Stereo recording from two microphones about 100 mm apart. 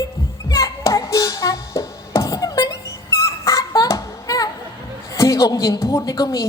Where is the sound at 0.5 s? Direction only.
35° left (ahead or behind).